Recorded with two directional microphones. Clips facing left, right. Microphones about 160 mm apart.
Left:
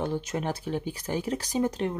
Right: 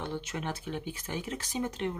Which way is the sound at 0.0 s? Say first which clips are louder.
Left 6 dB; 40° left (ahead or behind).